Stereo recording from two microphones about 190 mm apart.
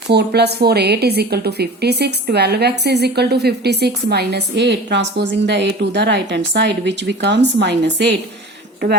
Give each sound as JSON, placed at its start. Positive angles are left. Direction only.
{"t": 0.1, "sound": "a woman's voice", "side_deg": -60}